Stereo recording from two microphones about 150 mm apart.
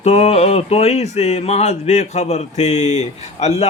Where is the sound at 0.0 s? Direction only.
45° left (ahead or behind).